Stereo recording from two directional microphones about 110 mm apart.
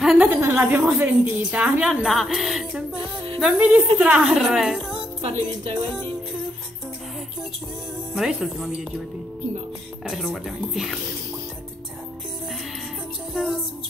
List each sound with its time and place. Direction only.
0.0 s a sound: centre (ahead or behind)
0.3 s a woman's voice: 15° right (ahead or behind)
5.2 s music: 55° right (ahead or behind)
8.1 s a woman's voice: 5° right (ahead or behind)
10.0 s a woman's voice: centre (ahead or behind)
13.3 s music: 5° right (ahead or behind)